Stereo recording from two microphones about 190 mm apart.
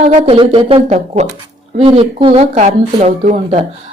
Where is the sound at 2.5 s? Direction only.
40° right (ahead or behind).